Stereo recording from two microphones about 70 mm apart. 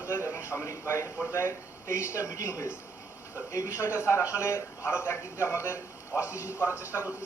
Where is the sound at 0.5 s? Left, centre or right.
Left.